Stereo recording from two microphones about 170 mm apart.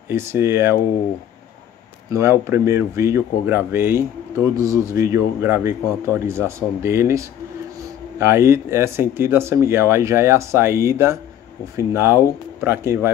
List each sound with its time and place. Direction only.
0.1 s speech: 15° right (ahead or behind)
2.0 s speech: 15° right (ahead or behind)